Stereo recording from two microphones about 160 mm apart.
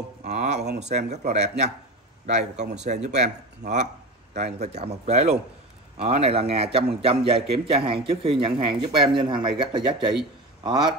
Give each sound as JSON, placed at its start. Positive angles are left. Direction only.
{"t": 0.2, "sound": "a man's voice", "side_deg": -45}